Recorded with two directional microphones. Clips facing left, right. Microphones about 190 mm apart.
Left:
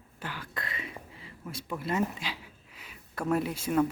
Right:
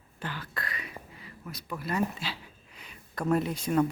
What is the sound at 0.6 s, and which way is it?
Whispering, 25° left (ahead or behind).